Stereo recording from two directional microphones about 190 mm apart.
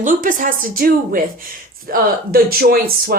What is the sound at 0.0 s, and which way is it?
Speech, 45° right (ahead or behind).